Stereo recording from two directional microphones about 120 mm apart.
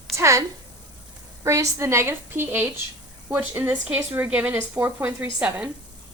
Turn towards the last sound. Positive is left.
turn(degrees=-15)  # may be behind; listen again after turning